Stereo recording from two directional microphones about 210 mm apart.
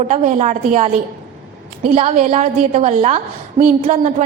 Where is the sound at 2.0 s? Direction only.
30° right (ahead or behind).